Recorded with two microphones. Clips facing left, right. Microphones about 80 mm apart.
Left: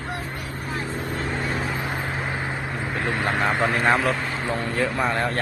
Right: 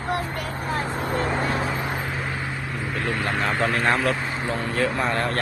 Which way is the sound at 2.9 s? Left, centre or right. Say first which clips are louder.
Left 1 dB; left.